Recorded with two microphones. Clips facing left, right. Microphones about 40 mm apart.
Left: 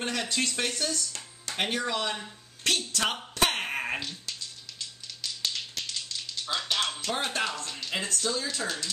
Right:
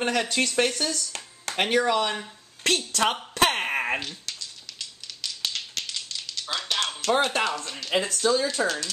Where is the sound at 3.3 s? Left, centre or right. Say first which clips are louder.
Right 5 dB; right.